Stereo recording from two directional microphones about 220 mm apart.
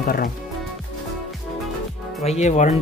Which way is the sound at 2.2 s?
30° left (ahead or behind).